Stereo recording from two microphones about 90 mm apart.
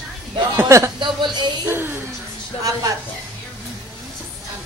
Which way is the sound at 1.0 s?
55° right (ahead or behind).